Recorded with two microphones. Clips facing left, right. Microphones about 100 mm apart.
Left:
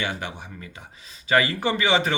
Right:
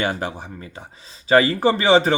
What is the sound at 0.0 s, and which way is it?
Speech, 40° right (ahead or behind).